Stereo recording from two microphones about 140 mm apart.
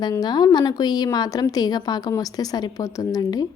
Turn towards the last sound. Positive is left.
turn(degrees=25)  # may be behind; listen again after turning